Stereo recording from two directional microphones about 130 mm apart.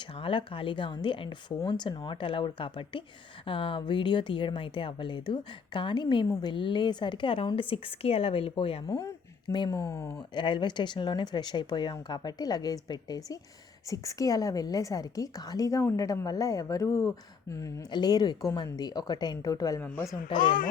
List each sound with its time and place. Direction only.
0.1 s a woman's voice: 45° left (ahead or behind)
8.9 s a sound: 25° left (ahead or behind)
9.6 s a woman's voice: 25° left (ahead or behind)
10.2 s a woman's voice: 40° left (ahead or behind)